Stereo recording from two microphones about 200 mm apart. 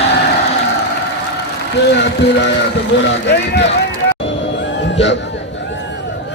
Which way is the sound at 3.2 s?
60° left (ahead or behind).